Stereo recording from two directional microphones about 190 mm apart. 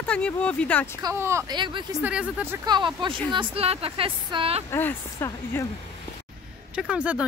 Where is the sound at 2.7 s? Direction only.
25° right (ahead or behind).